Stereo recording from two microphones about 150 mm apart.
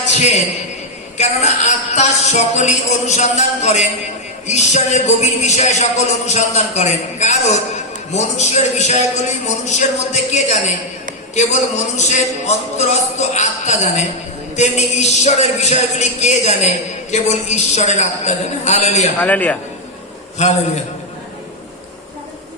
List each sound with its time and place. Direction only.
0.0 s a sound: 50° left (ahead or behind)
1.2 s speech: 50° left (ahead or behind)
19.2 s a man's voice: 10° left (ahead or behind)